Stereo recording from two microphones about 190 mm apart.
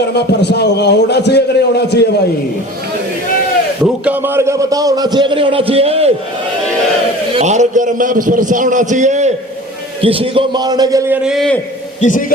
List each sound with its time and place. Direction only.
0.1 s a man's voice: 60° left (ahead or behind)
4.0 s a man's voice: 10° right (ahead or behind); by 6.1 s 30° right (ahead or behind)
7.3 s a man's voice: 40° right (ahead or behind)
10.0 s a man's voice: 30° right (ahead or behind)
11.3 s a man's voice: centre (ahead or behind)
11.9 s a man's voice: 40° left (ahead or behind)